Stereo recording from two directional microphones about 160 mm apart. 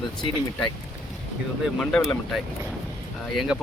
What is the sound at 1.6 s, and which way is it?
Speech, 5° left (ahead or behind).